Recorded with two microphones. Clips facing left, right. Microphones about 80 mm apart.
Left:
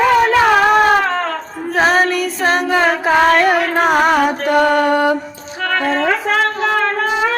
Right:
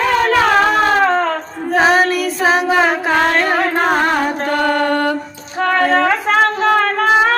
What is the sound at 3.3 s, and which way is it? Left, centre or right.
Music, centre.